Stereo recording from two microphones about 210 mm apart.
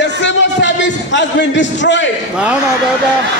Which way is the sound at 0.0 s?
55° left (ahead or behind).